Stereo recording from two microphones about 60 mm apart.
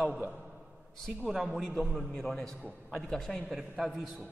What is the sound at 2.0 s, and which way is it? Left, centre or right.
A man's voice, centre.